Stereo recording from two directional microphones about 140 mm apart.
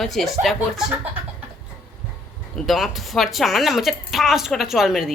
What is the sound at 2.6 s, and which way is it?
A woman's voice, centre (ahead or behind).